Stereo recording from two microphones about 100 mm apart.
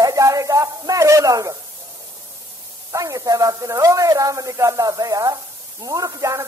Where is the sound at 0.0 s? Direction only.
35° right (ahead or behind).